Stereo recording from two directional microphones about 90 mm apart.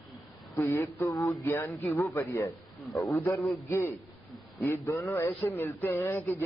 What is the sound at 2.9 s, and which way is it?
Speech, centre (ahead or behind).